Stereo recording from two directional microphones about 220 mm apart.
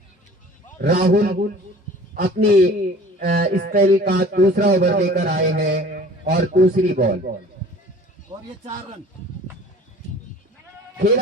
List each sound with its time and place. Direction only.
0.8 s a man's voice: 40° right (ahead or behind)
8.3 s a man's voice: 30° right (ahead or behind)